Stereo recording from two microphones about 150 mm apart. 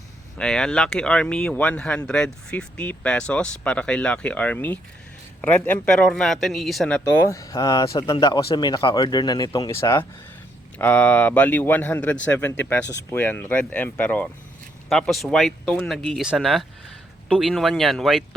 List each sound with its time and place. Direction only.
0.3 s speech: 5° left (ahead or behind)
7.3 s speech: 20° left (ahead or behind)
8.1 s speech: 35° left (ahead or behind); by 18.2 s centre (ahead or behind)